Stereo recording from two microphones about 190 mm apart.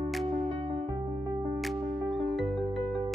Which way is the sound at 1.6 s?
Centre (ahead or behind).